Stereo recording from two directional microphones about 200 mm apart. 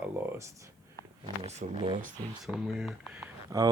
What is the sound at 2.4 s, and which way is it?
Speech, centre (ahead or behind).